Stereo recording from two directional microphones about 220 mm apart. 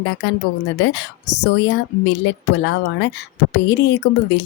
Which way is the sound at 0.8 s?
50° left (ahead or behind).